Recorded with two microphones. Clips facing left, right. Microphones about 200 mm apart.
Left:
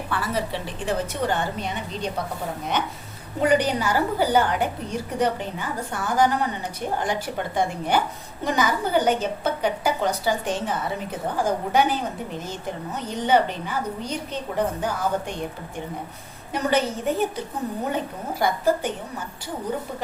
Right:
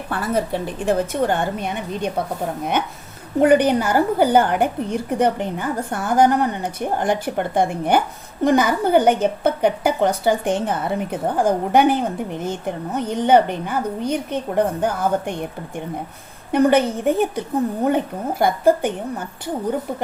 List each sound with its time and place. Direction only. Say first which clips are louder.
0.1 s a woman's voice: right 6 dB; 50° right (ahead or behind)
3.4 s a woman's voice: right 6 dB; 55° right (ahead or behind)
16.5 s a woman's voice: right 7 dB; 55° right (ahead or behind)